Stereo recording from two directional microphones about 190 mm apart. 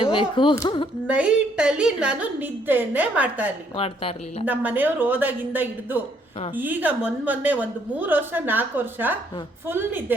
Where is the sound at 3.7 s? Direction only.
30° left (ahead or behind).